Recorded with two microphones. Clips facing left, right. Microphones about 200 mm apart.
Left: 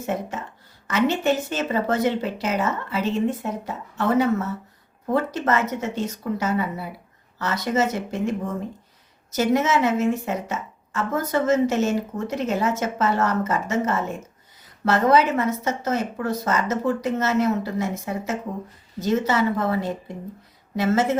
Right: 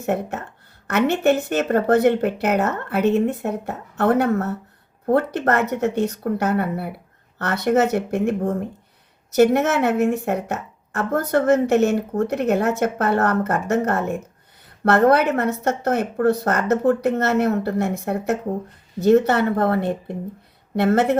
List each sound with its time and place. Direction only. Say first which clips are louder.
0.0 s a woman's voice: right 4 dB; 65° right (ahead or behind)